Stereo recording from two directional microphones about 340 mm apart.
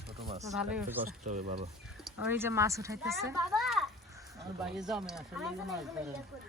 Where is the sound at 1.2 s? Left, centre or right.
Right.